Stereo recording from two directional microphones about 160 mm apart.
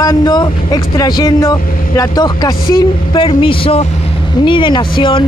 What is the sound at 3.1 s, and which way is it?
Speech, 35° left (ahead or behind).